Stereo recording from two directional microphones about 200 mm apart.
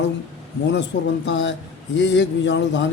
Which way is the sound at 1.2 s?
65° left (ahead or behind).